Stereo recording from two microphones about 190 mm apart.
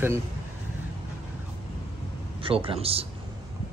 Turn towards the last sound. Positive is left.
turn(degrees=-30)  # may be behind; listen again after turning